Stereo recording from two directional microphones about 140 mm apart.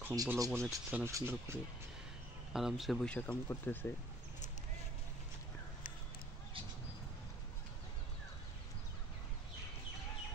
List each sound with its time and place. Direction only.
0.0 s speech: 25° right (ahead or behind)
2.5 s speech: centre (ahead or behind); by 3.9 s 15° left (ahead or behind)